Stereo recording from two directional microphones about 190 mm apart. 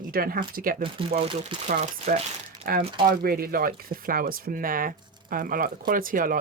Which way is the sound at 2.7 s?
50° right (ahead or behind).